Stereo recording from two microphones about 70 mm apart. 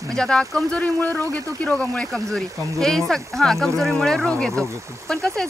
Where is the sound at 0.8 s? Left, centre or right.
Left; by 5.4 s centre.